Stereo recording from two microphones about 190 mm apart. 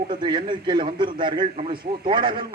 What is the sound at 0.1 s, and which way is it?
A man's voice, 25° right (ahead or behind).